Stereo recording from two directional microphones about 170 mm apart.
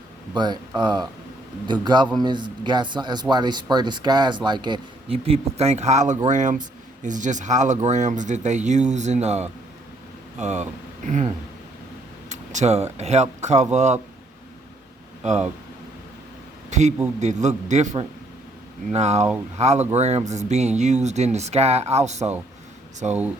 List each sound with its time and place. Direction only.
0.3 s speech: 25° right (ahead or behind); by 14.0 s 40° right (ahead or behind)
15.2 s speech: 40° right (ahead or behind)
16.6 s a sound: 45° right (ahead or behind)
17.2 s speech: 45° right (ahead or behind)
18.9 s speech: 40° right (ahead or behind)